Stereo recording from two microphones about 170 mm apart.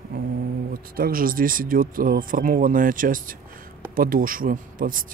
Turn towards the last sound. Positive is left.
turn(degrees=-55)  # may be behind; listen again after turning